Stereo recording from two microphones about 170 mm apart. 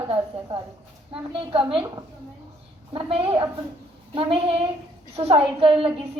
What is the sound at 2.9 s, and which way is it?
A woman's voice, 30° right (ahead or behind).